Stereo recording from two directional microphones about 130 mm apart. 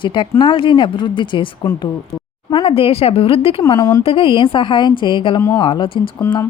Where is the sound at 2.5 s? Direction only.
50° left (ahead or behind).